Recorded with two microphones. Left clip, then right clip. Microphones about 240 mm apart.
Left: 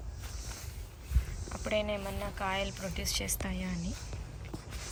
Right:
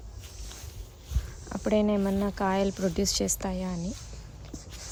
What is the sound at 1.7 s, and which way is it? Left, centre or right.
Speech, right.